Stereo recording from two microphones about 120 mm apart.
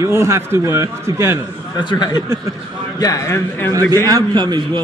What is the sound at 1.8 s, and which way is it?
A man's voice, 40° left (ahead or behind).